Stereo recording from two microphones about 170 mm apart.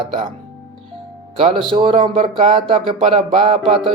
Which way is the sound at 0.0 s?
30° right (ahead or behind).